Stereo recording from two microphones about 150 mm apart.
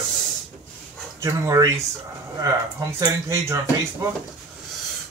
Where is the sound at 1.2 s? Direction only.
20° right (ahead or behind).